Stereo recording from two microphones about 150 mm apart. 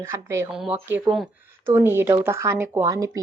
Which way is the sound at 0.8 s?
15° right (ahead or behind).